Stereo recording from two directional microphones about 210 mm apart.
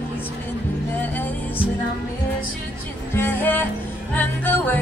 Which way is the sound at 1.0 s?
10° left (ahead or behind).